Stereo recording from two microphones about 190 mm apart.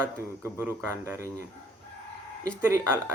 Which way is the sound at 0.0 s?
15° right (ahead or behind).